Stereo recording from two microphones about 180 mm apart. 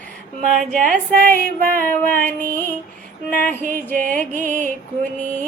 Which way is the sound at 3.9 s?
50° right (ahead or behind).